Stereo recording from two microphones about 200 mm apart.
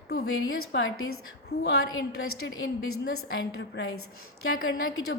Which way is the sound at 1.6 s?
65° left (ahead or behind).